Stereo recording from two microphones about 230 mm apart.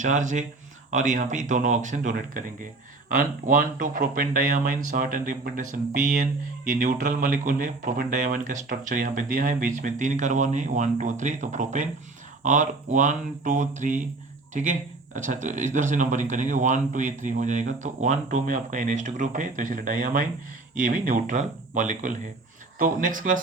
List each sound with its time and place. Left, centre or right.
0.0 s speech: right